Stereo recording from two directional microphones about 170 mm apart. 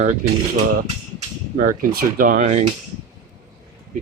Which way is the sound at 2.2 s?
55° right (ahead or behind).